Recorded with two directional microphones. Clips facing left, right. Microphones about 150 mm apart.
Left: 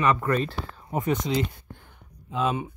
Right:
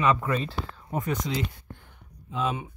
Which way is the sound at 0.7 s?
20° left (ahead or behind).